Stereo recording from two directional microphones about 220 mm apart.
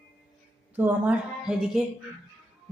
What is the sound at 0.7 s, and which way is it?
Speech, 5° right (ahead or behind).